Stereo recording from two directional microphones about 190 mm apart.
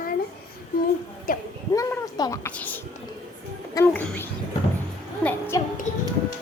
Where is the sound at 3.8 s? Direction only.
5° left (ahead or behind).